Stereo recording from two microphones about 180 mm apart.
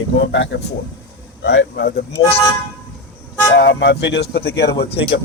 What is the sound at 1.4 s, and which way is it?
Speech, 75° left (ahead or behind).